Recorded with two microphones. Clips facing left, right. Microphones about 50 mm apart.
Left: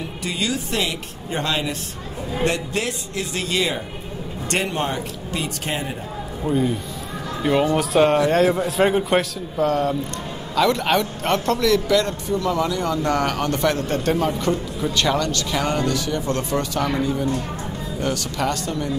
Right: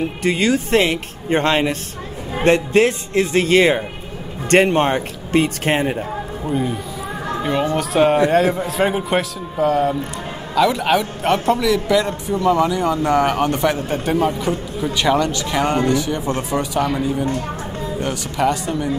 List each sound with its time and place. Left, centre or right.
0.2 s a man's voice: right
6.4 s a man's voice: centre